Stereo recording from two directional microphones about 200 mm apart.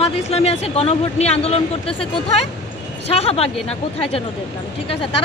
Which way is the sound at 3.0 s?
30° left (ahead or behind).